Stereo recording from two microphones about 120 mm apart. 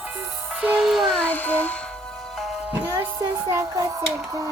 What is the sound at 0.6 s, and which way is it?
Music, 5° right (ahead or behind).